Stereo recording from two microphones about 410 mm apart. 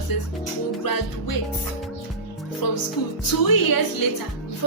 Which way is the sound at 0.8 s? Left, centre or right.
Left.